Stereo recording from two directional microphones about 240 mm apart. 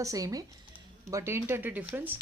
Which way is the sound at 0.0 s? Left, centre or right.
Centre.